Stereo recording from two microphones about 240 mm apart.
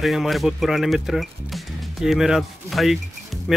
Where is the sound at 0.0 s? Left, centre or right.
Centre.